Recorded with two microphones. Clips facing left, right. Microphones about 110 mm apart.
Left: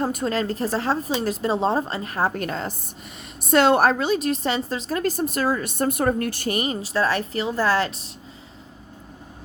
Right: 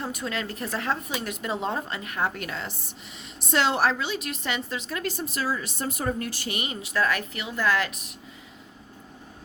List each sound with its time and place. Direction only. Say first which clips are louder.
0.0 s a woman's voice: left 8 dB; 40° left (ahead or behind)
3.4 s a woman's voice: left 7 dB; 55° left (ahead or behind); by 8.1 s 30° left (ahead or behind)